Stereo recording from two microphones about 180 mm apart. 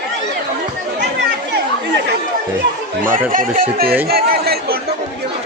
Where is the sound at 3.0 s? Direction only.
50° right (ahead or behind).